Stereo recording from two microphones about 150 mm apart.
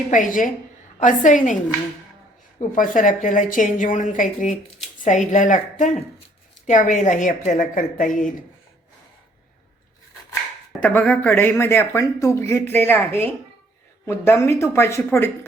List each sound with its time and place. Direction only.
0.1 s a woman's voice: 60° left (ahead or behind)
2.6 s a woman's voice: 60° left (ahead or behind)
10.8 s speech: 10° left (ahead or behind)